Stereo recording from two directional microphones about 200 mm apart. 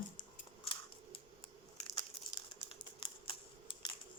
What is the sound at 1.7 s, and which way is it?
Crumpling, 25° left (ahead or behind).